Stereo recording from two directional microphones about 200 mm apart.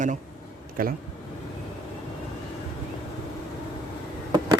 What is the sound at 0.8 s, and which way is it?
Speech, 45° right (ahead or behind).